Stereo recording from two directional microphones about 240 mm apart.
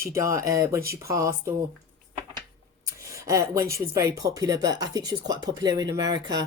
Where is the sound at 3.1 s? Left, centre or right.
Centre.